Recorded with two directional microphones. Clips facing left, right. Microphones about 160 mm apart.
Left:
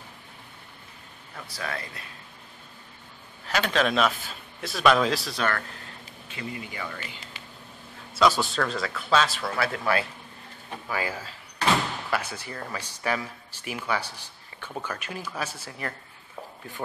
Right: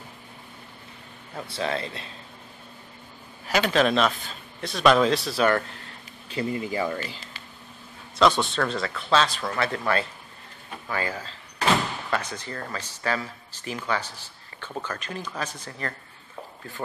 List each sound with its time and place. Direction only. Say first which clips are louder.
1.3 s speech: right 6 dB; 25° right (ahead or behind)
3.4 s a man's voice: right 3 dB; 10° right (ahead or behind)
6.2 s speech: right 8 dB; 35° right (ahead or behind)
8.2 s a man's voice: right 2 dB; 5° left (ahead or behind)